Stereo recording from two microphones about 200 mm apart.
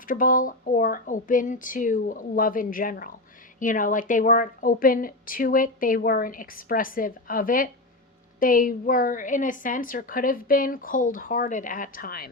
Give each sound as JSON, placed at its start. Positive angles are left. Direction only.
{"t": 0.0, "sound": "a woman's voice", "side_deg": 45}